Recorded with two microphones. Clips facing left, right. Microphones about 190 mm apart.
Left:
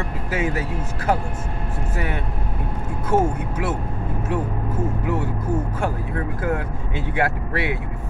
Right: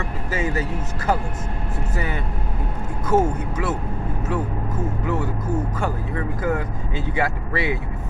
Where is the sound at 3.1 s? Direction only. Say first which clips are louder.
Right 1 dB; 10° left (ahead or behind).